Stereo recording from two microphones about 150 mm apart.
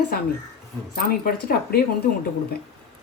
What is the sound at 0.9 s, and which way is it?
Speech, 75° left (ahead or behind).